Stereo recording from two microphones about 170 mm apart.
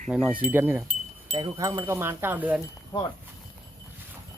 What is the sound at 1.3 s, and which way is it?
Wind chime, 25° right (ahead or behind).